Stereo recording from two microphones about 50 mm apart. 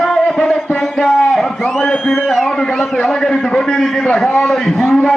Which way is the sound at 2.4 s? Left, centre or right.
Centre.